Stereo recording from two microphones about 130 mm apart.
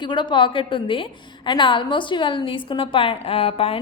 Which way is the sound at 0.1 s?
35° left (ahead or behind).